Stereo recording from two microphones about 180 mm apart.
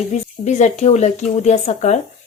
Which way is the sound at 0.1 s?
40° left (ahead or behind).